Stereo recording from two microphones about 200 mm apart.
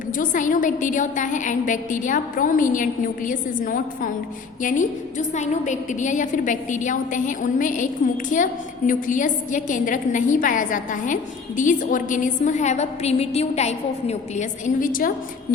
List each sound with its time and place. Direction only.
0.2 s a woman's voice: 40° left (ahead or behind)